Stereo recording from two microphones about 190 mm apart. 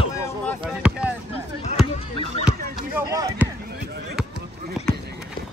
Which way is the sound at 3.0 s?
15° right (ahead or behind).